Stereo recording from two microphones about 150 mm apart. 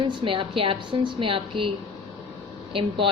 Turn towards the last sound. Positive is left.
turn(degrees=-35)  # may be behind; listen again after turning